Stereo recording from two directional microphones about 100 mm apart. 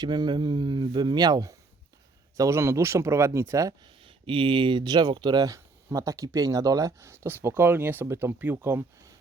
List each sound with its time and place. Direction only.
0.0 s speech: 45° right (ahead or behind)
2.4 s speech: 25° right (ahead or behind)
4.0 s speech: 60° right (ahead or behind); by 9.1 s 25° right (ahead or behind)